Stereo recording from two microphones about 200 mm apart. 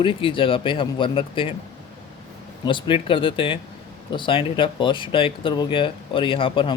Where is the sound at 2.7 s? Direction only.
25° left (ahead or behind).